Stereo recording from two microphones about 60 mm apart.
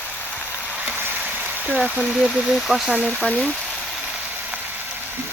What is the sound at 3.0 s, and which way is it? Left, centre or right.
Speech, centre.